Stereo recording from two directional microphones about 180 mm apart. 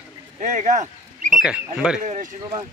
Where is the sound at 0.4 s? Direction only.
45° right (ahead or behind).